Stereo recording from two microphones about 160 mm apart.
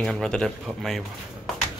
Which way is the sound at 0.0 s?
5° left (ahead or behind).